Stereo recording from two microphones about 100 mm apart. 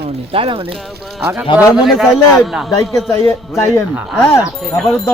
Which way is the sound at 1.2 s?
20° right (ahead or behind).